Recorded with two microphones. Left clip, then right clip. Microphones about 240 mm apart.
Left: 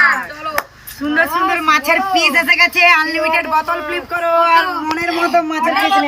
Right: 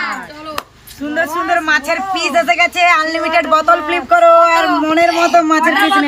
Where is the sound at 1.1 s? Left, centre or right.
Centre.